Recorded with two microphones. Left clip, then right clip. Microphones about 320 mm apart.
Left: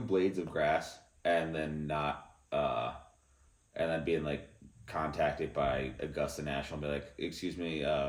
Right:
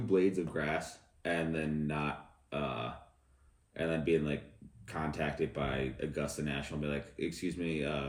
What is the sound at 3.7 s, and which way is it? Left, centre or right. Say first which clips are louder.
Speech: even; centre.